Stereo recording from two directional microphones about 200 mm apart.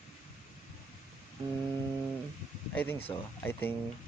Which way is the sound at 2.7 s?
10° left (ahead or behind).